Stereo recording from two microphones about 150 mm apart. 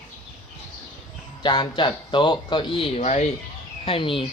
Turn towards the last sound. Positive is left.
turn(degrees=35)  # may be behind; listen again after turning